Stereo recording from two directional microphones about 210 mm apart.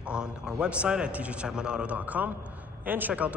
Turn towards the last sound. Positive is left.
turn(degrees=-5)  # may be behind; listen again after turning